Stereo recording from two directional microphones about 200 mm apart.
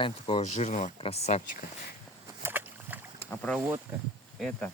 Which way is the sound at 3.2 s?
10° left (ahead or behind).